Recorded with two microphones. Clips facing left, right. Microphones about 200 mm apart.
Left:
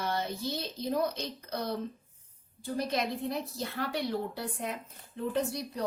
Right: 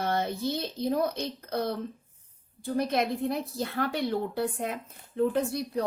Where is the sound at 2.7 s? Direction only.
55° right (ahead or behind).